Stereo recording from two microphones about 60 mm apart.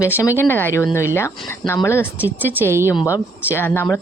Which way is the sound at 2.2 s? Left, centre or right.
Right.